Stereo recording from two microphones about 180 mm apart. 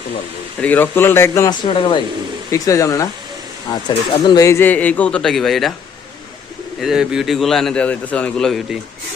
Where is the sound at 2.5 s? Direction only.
20° left (ahead or behind).